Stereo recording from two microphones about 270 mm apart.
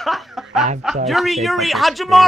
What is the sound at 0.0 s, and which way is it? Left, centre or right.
Snicker, centre.